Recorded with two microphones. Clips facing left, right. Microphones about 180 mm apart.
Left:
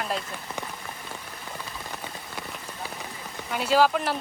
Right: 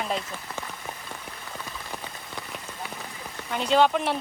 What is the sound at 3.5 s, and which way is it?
Speech, 5° left (ahead or behind).